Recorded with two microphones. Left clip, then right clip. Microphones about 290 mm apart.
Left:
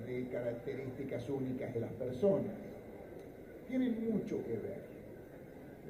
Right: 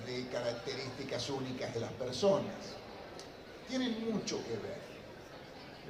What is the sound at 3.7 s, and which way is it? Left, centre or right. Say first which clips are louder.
Speech: even; centre.